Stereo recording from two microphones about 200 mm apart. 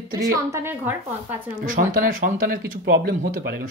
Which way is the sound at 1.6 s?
45° right (ahead or behind).